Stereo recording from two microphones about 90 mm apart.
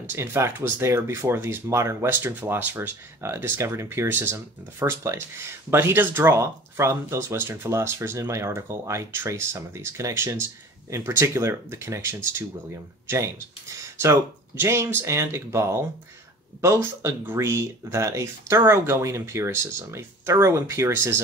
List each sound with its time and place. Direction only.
0.1 s speech: 30° right (ahead or behind)